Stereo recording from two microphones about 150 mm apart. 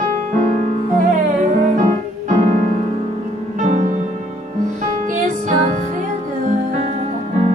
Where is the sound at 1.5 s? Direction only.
55° right (ahead or behind).